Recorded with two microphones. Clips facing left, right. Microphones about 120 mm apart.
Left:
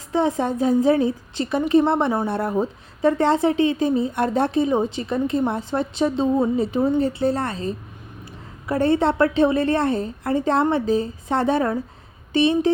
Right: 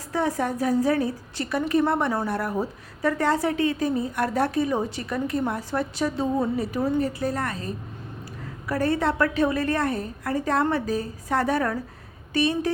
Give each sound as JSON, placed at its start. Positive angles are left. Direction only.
{"t": 0.1, "sound": "a woman's voice", "side_deg": 20}